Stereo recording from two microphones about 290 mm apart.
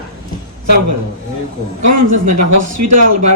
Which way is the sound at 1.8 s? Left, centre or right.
Right.